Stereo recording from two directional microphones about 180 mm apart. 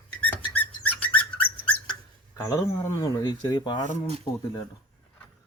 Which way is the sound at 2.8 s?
25° left (ahead or behind).